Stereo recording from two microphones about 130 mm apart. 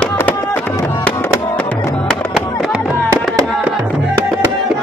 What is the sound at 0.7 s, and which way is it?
Music, 25° left (ahead or behind).